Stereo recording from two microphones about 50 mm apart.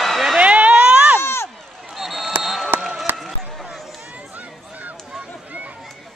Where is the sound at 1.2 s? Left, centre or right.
Left.